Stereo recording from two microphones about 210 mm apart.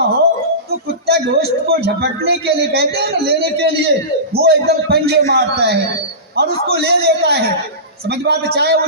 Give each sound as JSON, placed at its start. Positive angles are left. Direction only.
{"t": 0.7, "sound": "speech", "side_deg": -50}